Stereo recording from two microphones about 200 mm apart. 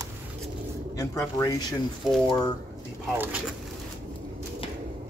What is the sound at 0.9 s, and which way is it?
Speech, 15° left (ahead or behind).